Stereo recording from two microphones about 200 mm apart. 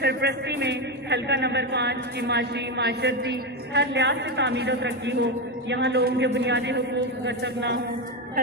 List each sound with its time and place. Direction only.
0.0 s a man's voice: 55° right (ahead or behind)